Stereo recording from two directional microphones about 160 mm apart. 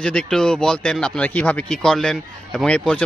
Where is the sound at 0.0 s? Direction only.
5° left (ahead or behind).